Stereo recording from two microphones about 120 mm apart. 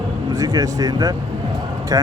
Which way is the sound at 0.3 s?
30° right (ahead or behind).